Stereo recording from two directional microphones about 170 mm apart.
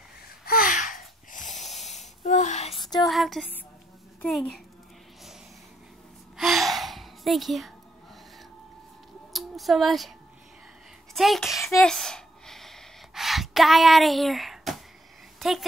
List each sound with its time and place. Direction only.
0.5 s wheeze: 55° left (ahead or behind)
3.0 s music: centre (ahead or behind)
6.3 s gasp: centre (ahead or behind)
9.3 s speech: centre (ahead or behind)
11.1 s a sound: centre (ahead or behind)